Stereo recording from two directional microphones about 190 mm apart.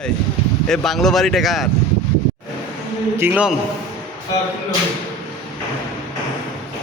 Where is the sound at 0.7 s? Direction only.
Centre (ahead or behind).